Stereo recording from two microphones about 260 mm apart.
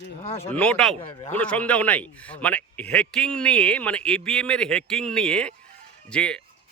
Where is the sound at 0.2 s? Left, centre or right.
Left.